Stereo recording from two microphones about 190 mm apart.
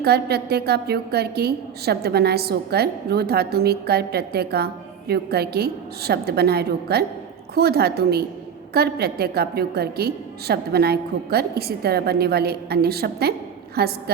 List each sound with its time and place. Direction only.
0.0 s a woman's voice: 55° right (ahead or behind)